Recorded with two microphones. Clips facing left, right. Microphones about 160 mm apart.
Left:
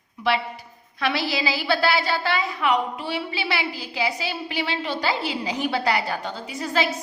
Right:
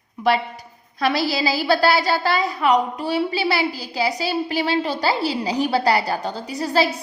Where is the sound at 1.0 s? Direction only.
40° right (ahead or behind).